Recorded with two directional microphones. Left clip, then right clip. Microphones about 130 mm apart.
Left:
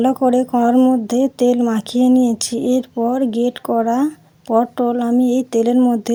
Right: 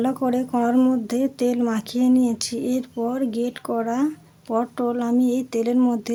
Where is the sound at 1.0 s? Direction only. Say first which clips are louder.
Left 7 dB; 35° left (ahead or behind).